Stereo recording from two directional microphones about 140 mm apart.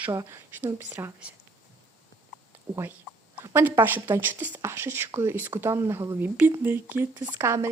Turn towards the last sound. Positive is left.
turn(degrees=-20)  # may be behind; listen again after turning